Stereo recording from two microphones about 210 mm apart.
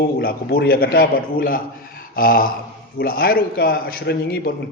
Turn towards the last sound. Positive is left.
turn(degrees=50)  # may be behind; listen again after turning